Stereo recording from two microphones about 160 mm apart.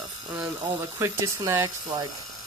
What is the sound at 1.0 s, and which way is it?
Speech, 20° right (ahead or behind).